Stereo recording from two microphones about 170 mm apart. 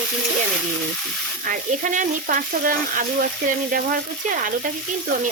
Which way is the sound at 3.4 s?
55° right (ahead or behind).